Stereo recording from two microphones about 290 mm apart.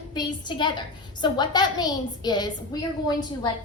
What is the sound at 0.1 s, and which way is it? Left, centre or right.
A woman's voice, centre.